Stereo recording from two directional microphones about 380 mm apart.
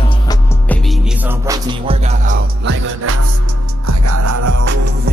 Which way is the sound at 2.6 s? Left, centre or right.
Right.